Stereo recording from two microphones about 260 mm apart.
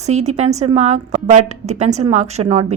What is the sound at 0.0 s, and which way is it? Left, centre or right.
A woman's voice, right.